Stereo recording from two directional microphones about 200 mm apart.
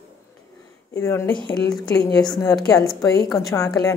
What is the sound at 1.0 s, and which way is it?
Speech, 15° left (ahead or behind).